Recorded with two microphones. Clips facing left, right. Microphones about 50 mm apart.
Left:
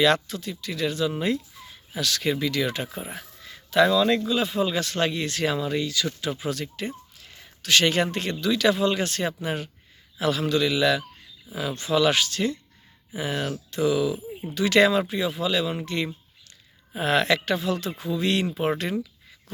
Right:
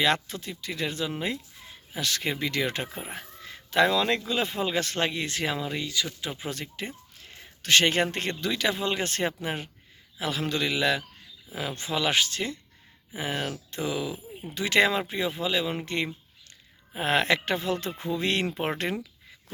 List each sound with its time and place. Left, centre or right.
0.0 s speech: right
2.9 s speech: centre
3.4 s a sound: right
4.3 s a man's voice: right
10.4 s speech: right
16.9 s speech: right